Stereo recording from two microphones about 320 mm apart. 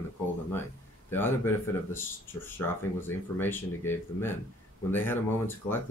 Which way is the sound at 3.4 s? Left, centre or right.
Centre.